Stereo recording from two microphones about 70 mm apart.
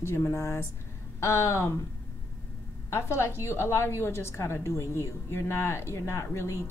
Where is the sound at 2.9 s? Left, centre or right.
Left.